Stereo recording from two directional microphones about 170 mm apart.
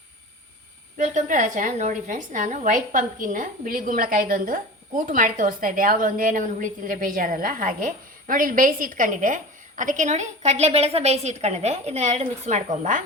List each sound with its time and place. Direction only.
0.9 s a woman's voice: 45° right (ahead or behind)